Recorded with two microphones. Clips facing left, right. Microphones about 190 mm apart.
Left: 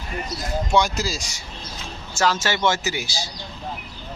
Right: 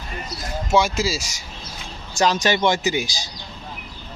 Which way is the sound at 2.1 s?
15° right (ahead or behind).